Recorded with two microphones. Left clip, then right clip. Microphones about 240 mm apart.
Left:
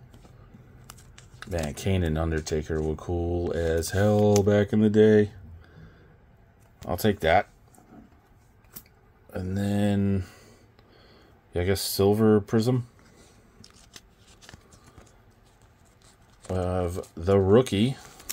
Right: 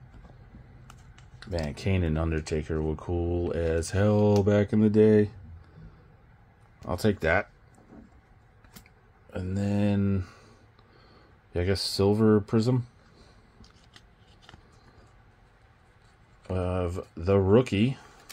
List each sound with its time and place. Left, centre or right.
1.4 s speech: centre
6.9 s speech: centre
9.3 s speech: centre
11.5 s speech: centre
13.6 s scissors: left
16.4 s speech: centre